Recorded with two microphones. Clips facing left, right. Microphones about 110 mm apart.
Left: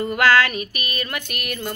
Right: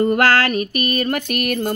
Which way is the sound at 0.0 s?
45° right (ahead or behind).